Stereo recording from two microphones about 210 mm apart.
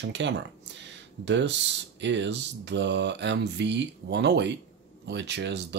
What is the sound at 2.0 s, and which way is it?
Speech, 60° right (ahead or behind).